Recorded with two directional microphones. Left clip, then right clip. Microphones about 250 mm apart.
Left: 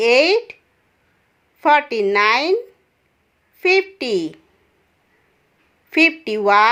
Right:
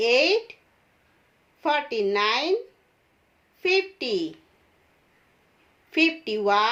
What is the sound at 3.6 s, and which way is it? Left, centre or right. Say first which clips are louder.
Speech: left 7 dB; left.